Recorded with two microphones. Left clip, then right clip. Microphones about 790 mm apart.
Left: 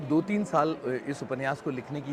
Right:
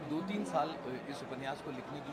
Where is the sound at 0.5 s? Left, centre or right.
Left.